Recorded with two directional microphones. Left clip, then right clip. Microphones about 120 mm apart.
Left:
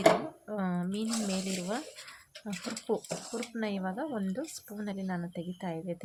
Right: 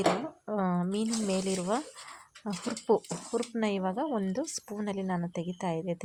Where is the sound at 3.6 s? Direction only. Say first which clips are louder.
Right 3 dB; 40° right (ahead or behind).